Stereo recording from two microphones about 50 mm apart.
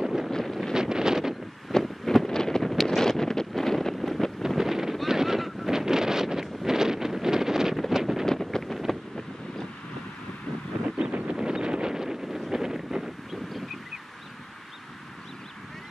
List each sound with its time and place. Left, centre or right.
0.0 s wind noise: centre
0.3 s wind noise: centre
0.7 s wind noise: centre
1.7 s wind: centre
2.7 s wind noise: centre
3.0 s wind noise: centre
4.6 s horse: centre
5.7 s wind noise: centre
8.3 s wind noise: centre
11.0 s wind noise: right
12.4 s wind: centre